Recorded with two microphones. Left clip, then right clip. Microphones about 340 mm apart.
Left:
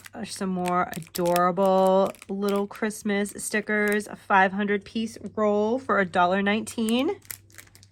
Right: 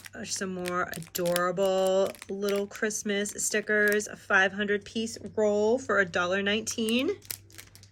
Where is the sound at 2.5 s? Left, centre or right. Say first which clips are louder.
Left 2 dB; left.